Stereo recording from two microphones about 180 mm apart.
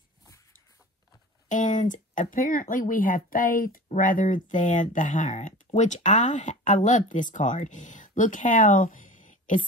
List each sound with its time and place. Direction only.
1.5 s speech: 45° left (ahead or behind)